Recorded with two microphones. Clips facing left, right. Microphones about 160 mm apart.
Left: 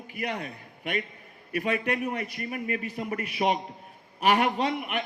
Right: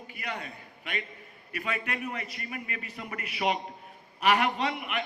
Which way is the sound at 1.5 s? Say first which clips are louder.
Left 7 dB; 40° left (ahead or behind).